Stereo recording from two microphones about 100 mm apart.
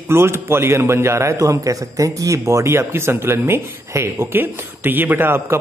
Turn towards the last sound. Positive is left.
turn(degrees=-20)  # may be behind; listen again after turning